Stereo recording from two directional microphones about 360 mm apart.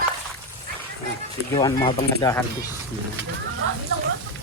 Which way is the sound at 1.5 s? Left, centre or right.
Centre.